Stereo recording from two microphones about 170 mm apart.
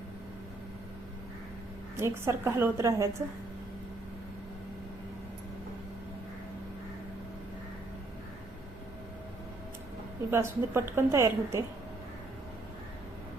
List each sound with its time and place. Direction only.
2.0 s a woman's voice: 15° right (ahead or behind)
10.3 s a woman's voice: 15° right (ahead or behind)